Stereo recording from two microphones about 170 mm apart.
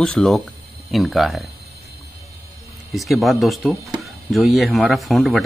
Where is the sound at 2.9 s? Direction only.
Centre (ahead or behind).